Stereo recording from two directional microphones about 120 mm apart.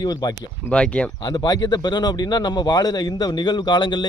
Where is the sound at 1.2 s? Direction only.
35° left (ahead or behind).